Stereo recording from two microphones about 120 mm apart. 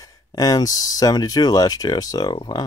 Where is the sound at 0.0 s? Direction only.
30° left (ahead or behind).